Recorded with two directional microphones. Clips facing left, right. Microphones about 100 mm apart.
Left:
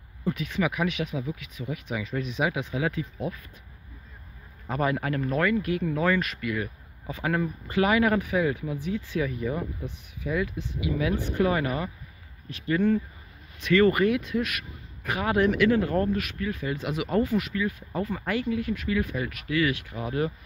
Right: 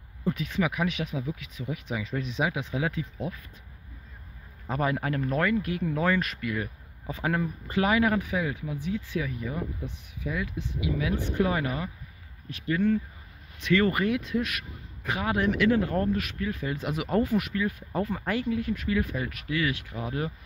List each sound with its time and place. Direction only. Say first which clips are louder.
0.3 s speech: left 1 dB; 35° right (ahead or behind)
5.0 s speech: left 1 dB; 30° right (ahead or behind)
12.4 s speech: left 2 dB; 5° right (ahead or behind)
13.6 s speech: left 4 dB; 20° right (ahead or behind); by 18.1 s 40° right (ahead or behind)
18.1 s speech: left 3 dB; 30° right (ahead or behind)